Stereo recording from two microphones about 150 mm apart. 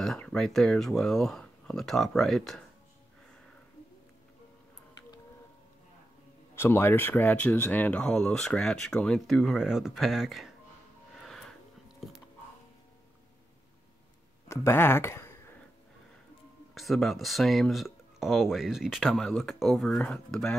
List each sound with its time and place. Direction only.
0.0 s speech: 5° left (ahead or behind)
6.5 s speech: 15° left (ahead or behind); by 10.5 s centre (ahead or behind)
14.5 s speech: 15° left (ahead or behind)
16.7 s speech: centre (ahead or behind)